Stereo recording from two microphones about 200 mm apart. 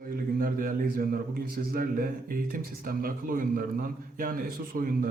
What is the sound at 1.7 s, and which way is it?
Speech, 45° right (ahead or behind).